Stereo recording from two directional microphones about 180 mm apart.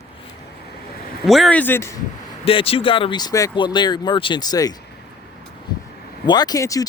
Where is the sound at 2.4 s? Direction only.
30° left (ahead or behind).